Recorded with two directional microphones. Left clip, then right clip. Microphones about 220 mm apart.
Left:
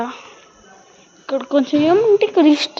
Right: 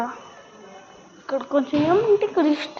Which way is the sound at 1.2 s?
45° left (ahead or behind).